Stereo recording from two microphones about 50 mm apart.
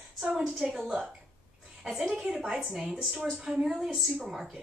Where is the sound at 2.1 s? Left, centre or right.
Centre.